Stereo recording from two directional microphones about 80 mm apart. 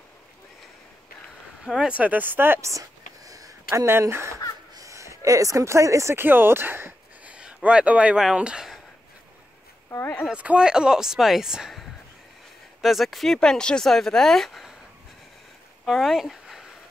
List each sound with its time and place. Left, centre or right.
1.6 s speech: centre; by 2.6 s right
2.6 s a sound: right
4.1 s speech: right
6.2 s speech: right
7.2 s a sound: centre
9.8 s a sound: left
10.3 s speech: centre
12.8 s speech: centre
15.8 s speech: centre